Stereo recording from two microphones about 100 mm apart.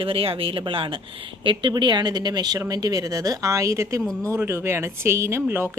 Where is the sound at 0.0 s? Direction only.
65° right (ahead or behind).